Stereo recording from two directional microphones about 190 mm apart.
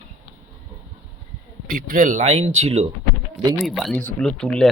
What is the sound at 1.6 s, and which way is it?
Speech, 45° right (ahead or behind).